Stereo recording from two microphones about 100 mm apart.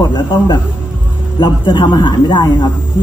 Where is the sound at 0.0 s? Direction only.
45° left (ahead or behind).